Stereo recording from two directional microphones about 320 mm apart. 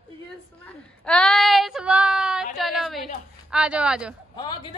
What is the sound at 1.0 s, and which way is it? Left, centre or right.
Child singing, centre.